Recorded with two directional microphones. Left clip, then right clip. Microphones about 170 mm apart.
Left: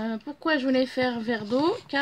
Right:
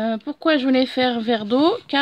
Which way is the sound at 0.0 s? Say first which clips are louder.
Right 8 dB; 40° right (ahead or behind).